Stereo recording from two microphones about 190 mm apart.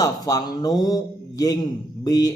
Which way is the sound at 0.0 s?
20° left (ahead or behind).